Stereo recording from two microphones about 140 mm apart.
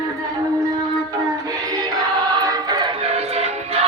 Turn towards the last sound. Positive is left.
turn(degrees=-45)  # may be behind; listen again after turning